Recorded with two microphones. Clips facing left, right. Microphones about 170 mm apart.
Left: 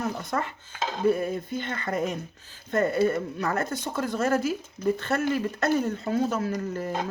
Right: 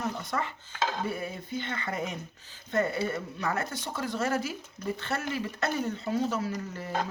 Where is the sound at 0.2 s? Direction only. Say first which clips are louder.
Left 3 dB; 50° left (ahead or behind).